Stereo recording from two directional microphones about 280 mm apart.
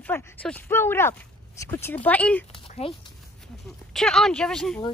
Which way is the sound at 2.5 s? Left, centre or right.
Centre.